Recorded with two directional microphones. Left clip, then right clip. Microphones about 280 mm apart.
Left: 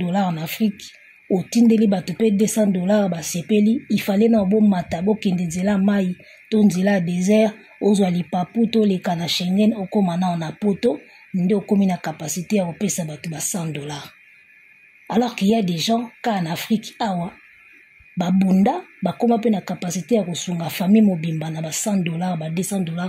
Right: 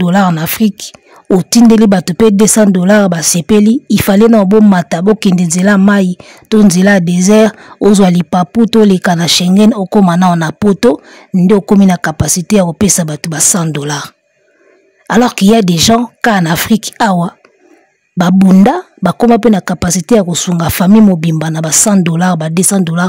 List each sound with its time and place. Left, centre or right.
0.0 s speech: right